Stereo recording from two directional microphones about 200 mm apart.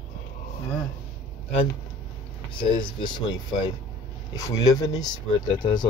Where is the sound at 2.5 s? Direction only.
25° left (ahead or behind).